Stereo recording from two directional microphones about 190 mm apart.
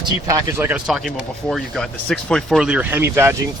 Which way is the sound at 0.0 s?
15° right (ahead or behind).